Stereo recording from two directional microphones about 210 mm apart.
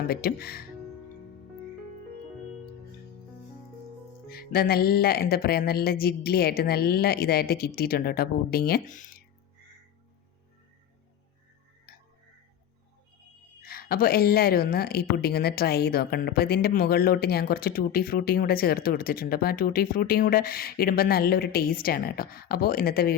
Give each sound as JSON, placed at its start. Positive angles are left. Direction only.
{"t": 0.1, "sound": "a woman's voice", "side_deg": 45}
{"t": 4.3, "sound": "a woman's voice", "side_deg": 45}
{"t": 13.6, "sound": "a woman's voice", "side_deg": 45}